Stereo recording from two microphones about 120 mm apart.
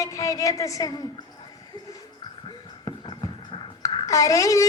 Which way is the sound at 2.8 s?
40° left (ahead or behind).